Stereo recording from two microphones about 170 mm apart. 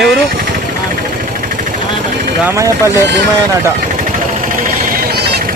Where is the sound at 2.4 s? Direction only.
15° right (ahead or behind).